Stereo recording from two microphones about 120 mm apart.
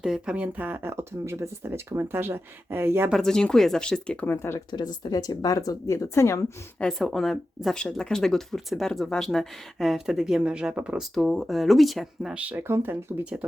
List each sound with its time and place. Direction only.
0.0 s speech: 5° right (ahead or behind)
3.1 s speech: 5° left (ahead or behind)
4.3 s speech: 20° left (ahead or behind)
4.7 s speech: 35° left (ahead or behind)
6.7 s speech: 5° left (ahead or behind); by 13.2 s 20° right (ahead or behind)